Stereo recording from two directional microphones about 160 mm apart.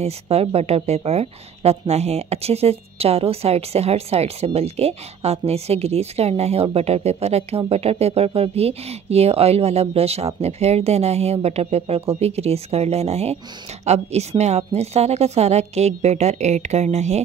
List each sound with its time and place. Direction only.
0.0 s a woman's voice: 40° right (ahead or behind)